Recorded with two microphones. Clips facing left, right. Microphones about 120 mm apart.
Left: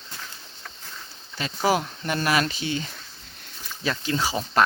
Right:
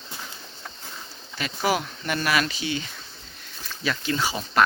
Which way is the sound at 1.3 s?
30° left (ahead or behind).